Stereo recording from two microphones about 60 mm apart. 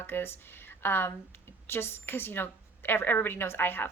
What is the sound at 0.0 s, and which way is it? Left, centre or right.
Speech, left.